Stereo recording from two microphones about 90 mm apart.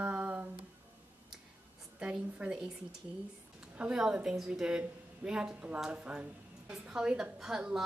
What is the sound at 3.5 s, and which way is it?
A woman's voice, 10° right (ahead or behind).